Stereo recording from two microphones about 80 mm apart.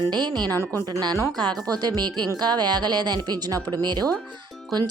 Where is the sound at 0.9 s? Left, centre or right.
Right.